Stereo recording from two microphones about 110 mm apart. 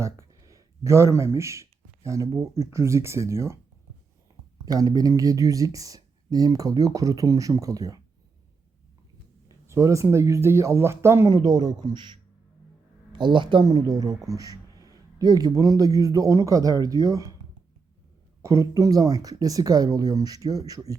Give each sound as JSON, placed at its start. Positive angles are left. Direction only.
{"t": 0.0, "sound": "a sound", "side_deg": -30}
{"t": 2.0, "sound": "speech", "side_deg": -30}
{"t": 4.6, "sound": "speech", "side_deg": -35}
{"t": 9.5, "sound": "speech", "side_deg": -25}
{"t": 11.3, "sound": "speech", "side_deg": -40}
{"t": 13.7, "sound": "a man's voice", "side_deg": -35}
{"t": 18.4, "sound": "speech", "side_deg": -30}